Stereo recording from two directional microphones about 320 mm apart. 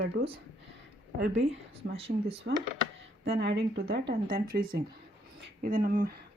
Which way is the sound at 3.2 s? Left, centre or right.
Right.